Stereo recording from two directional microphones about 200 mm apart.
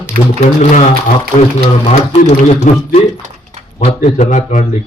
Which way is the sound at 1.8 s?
35° left (ahead or behind).